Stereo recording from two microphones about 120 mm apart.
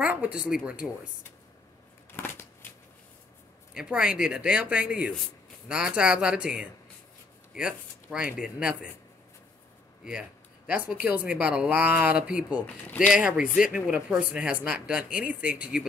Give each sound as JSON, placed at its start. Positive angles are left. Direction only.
{"t": 0.0, "sound": "speech", "side_deg": -10}
{"t": 2.1, "sound": "a sound", "side_deg": 20}
{"t": 2.6, "sound": "shuffling cards", "side_deg": 20}
{"t": 3.7, "sound": "speech", "side_deg": -5}
{"t": 10.9, "sound": "speech", "side_deg": -15}